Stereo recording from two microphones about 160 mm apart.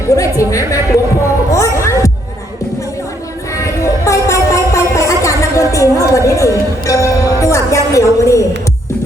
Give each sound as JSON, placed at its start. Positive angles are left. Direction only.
{"t": 0.2, "sound": "speech", "side_deg": 20}
{"t": 1.5, "sound": "music", "side_deg": 20}
{"t": 3.6, "sound": "a sound", "side_deg": 20}